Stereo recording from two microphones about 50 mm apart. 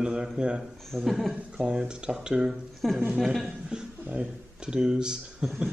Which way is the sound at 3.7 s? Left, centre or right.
Centre.